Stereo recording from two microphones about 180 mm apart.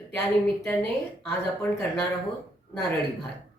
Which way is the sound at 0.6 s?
5° left (ahead or behind).